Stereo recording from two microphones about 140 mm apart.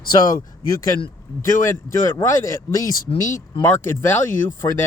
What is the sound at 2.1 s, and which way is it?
Speech, 20° left (ahead or behind).